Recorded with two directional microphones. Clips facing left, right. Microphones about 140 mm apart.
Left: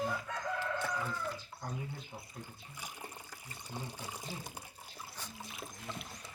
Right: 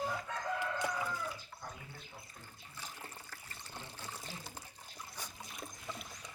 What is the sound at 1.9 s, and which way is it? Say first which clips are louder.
Water: left 5 dB; 15° left (ahead or behind).